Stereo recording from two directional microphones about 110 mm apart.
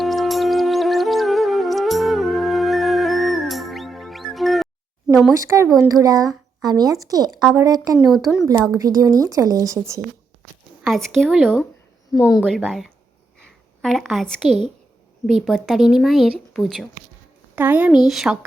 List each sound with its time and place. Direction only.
0.0 s music: centre (ahead or behind)
5.9 s speech: 35° right (ahead or behind)
8.1 s speech: 5° right (ahead or behind)
8.8 s speech: 35° right (ahead or behind)
10.8 s speech: centre (ahead or behind)
12.1 s speech: 30° left (ahead or behind)
12.5 s a woman's voice: centre (ahead or behind)
17.5 s speech: 15° right (ahead or behind)